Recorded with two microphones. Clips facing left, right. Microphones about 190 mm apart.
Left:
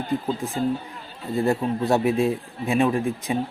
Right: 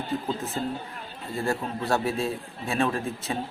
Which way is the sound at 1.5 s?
20° left (ahead or behind).